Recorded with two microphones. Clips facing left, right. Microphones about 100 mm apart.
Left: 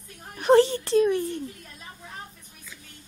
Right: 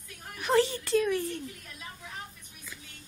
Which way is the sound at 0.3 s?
35° left (ahead or behind).